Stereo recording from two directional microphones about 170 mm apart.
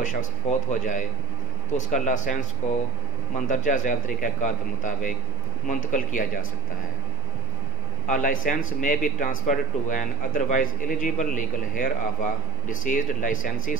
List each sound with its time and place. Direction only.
0.0 s a man's voice: 50° left (ahead or behind)
3.3 s a man's voice: 50° left (ahead or behind)
8.1 s a man's voice: 50° left (ahead or behind)